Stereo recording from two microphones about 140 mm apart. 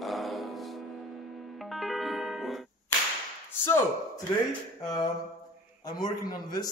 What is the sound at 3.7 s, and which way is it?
Speech, 15° left (ahead or behind).